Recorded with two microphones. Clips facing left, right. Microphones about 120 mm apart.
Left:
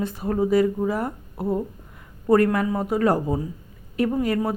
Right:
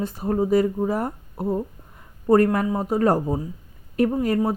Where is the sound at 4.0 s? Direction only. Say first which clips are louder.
Right 2 dB; 50° right (ahead or behind).